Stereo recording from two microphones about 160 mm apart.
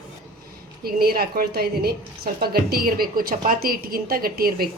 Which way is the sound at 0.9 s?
70° right (ahead or behind).